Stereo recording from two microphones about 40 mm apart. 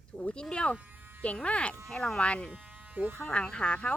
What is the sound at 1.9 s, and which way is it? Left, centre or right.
Speech, centre.